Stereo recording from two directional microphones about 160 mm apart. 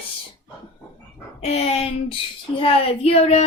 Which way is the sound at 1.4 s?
40° left (ahead or behind).